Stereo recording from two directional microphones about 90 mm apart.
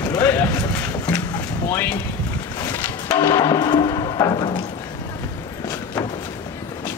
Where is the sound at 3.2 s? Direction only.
40° left (ahead or behind).